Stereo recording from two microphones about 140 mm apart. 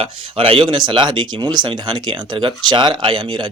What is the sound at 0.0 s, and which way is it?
Speech, 40° right (ahead or behind).